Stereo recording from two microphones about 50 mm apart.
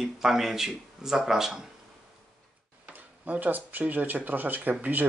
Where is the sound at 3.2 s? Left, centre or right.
Right.